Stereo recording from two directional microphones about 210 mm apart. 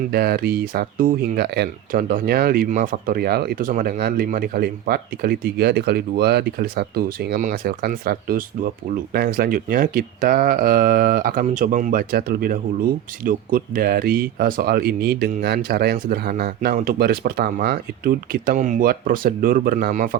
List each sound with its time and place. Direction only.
0.1 s speech: 45° right (ahead or behind)